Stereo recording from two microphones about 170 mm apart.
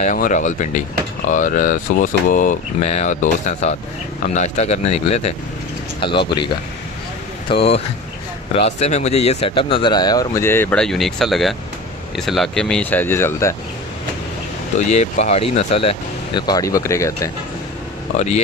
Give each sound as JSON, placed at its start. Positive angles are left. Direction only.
{"t": 0.0, "sound": "speech", "side_deg": 50}
{"t": 5.9, "sound": "speech", "side_deg": 30}
{"t": 15.1, "sound": "speech", "side_deg": 40}